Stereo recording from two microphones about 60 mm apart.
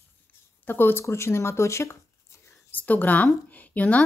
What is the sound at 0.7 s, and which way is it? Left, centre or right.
Speech, left.